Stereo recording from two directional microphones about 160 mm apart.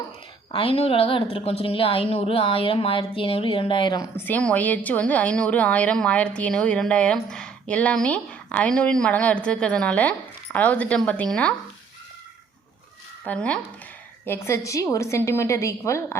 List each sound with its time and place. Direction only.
0.5 s a woman's voice: 35° left (ahead or behind)
4.3 s a woman's voice: 10° left (ahead or behind)
13.2 s a woman's voice: 5° left (ahead or behind)